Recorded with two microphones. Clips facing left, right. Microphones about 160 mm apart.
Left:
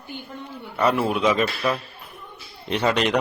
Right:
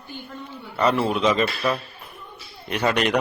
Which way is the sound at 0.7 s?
10° left (ahead or behind).